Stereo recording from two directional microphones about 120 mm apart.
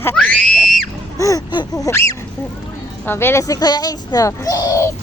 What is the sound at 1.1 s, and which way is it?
A child's voice, 25° left (ahead or behind).